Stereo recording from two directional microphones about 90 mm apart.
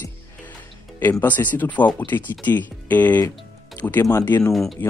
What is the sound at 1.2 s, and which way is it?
Speech, 20° left (ahead or behind).